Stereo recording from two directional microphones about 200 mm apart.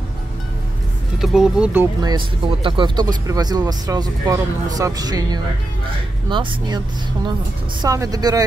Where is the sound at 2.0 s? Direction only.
20° right (ahead or behind).